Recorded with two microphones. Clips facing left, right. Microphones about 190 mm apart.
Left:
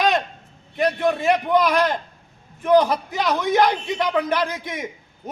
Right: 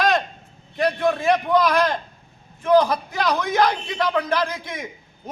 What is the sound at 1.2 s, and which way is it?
Speech, 20° left (ahead or behind).